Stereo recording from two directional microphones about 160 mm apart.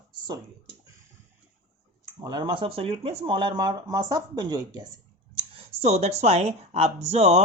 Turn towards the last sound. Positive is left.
turn(degrees=-40)  # may be behind; listen again after turning